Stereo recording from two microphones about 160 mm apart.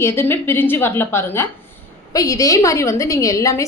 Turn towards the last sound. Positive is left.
turn(degrees=20)  # may be behind; listen again after turning